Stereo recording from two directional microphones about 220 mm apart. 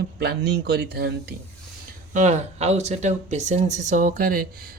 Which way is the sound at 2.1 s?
30° right (ahead or behind).